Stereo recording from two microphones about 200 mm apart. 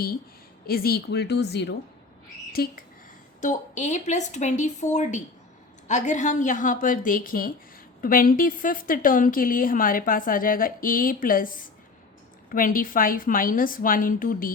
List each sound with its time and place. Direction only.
0.7 s a woman's voice: 50° left (ahead or behind)
3.4 s a woman's voice: 35° left (ahead or behind)